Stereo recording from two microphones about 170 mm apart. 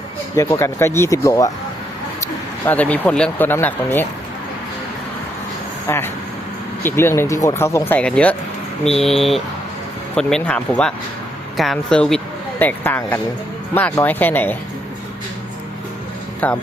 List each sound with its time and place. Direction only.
0.3 s speech: 15° left (ahead or behind)
5.9 s speech: 15° left (ahead or behind)
16.4 s speech: 10° left (ahead or behind)